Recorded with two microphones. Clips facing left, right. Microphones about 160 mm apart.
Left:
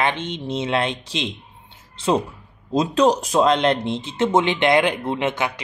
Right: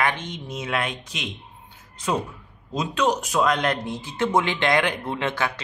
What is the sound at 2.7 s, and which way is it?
Speech, 35° left (ahead or behind).